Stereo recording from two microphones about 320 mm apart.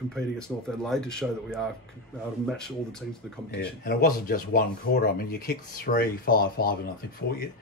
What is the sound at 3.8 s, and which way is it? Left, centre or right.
Speech, left.